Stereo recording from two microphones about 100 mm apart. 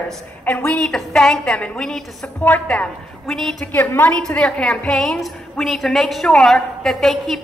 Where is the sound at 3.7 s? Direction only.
20° left (ahead or behind).